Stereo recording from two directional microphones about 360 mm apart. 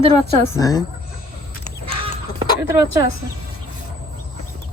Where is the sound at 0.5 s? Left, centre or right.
Centre.